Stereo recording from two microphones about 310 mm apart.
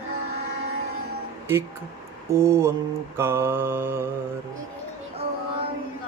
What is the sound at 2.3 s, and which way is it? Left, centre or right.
A man's voice, centre.